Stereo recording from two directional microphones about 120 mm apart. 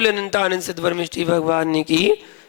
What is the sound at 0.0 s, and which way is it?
A man's voice, 25° right (ahead or behind).